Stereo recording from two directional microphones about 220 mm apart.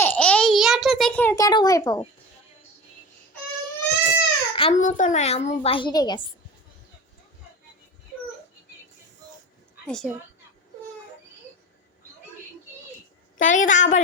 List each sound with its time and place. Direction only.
0.0 s a sound: 5° left (ahead or behind)
4.0 s speech: 25° left (ahead or behind)
9.8 s a woman's voice: 5° left (ahead or behind)
13.4 s a woman's voice: 35° left (ahead or behind)